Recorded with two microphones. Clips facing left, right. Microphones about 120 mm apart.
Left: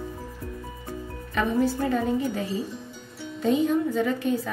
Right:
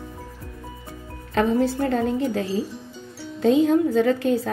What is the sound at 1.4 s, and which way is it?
A woman's voice, 90° right.